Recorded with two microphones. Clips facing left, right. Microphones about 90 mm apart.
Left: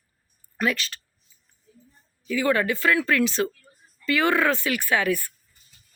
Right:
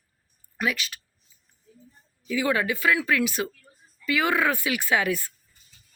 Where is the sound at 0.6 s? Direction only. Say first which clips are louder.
Left 2 dB; 5° right (ahead or behind).